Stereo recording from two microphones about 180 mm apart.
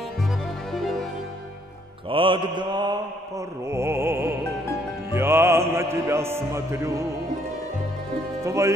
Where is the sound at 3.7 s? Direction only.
15° right (ahead or behind).